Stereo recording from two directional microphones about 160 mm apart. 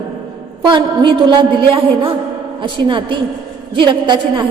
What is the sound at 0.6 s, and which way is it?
A woman's voice, 30° right (ahead or behind).